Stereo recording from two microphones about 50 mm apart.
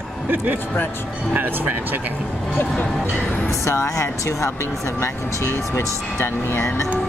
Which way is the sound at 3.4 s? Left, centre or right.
Left.